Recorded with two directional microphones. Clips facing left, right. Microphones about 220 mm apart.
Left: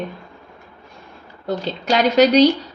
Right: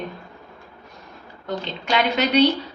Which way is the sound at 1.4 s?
40° left (ahead or behind).